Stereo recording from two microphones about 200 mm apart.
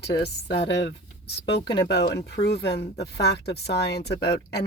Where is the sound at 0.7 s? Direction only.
60° left (ahead or behind).